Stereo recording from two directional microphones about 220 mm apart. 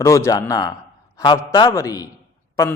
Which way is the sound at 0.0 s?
15° left (ahead or behind).